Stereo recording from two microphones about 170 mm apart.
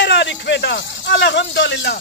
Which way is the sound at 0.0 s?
90° left.